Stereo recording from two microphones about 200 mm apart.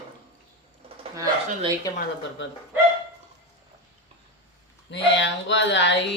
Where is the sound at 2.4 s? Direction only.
70° left (ahead or behind).